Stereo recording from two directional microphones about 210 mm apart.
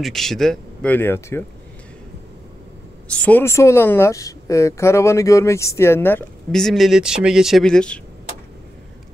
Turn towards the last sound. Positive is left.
turn(degrees=5)  # may be behind; listen again after turning